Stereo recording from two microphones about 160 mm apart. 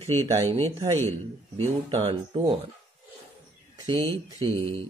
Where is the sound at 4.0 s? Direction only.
20° left (ahead or behind).